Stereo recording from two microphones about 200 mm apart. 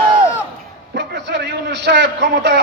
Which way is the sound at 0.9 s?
55° right (ahead or behind).